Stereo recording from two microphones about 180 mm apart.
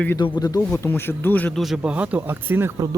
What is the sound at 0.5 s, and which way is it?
Speech, 15° left (ahead or behind).